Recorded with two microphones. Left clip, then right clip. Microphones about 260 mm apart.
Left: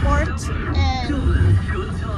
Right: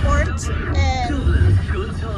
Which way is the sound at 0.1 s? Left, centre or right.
Left.